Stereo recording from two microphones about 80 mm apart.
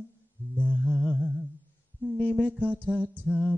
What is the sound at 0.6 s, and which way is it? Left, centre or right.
Humming, centre.